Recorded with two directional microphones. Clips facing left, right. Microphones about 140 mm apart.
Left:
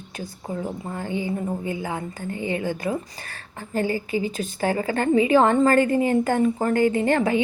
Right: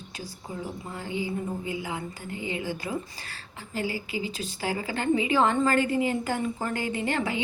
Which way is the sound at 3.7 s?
50° left (ahead or behind).